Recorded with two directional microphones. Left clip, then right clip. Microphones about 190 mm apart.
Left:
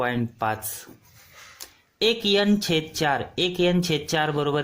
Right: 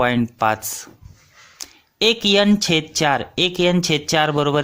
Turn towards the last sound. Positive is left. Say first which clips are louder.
# right 6 dB
turn(degrees=-25)  # may be behind; listen again after turning